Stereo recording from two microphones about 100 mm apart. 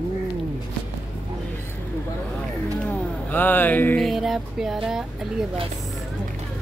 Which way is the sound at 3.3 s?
20° left (ahead or behind).